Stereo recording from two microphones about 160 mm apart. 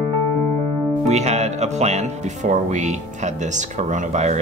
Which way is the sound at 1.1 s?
45° right (ahead or behind).